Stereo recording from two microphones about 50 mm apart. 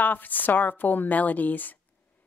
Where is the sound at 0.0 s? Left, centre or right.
Left.